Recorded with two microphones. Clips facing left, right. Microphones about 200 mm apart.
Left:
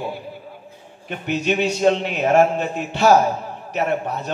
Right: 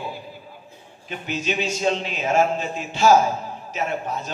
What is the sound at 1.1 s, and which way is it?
A man's voice, 60° left (ahead or behind).